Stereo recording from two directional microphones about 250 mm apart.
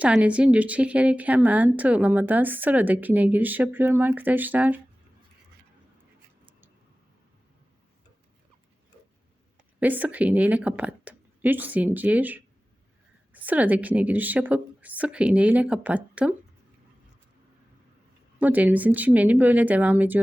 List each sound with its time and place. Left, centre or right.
0.0 s a woman's voice: centre
9.8 s a woman's voice: centre
18.3 s a woman's voice: centre